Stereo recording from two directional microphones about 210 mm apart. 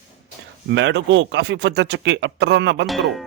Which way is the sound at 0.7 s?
60° right (ahead or behind).